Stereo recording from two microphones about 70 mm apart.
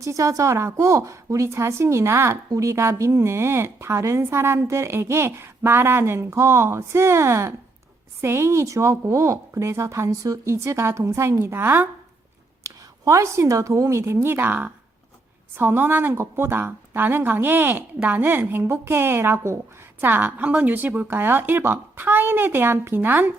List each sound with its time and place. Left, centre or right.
0.0 s a woman's voice: right
12.6 s a woman's voice: right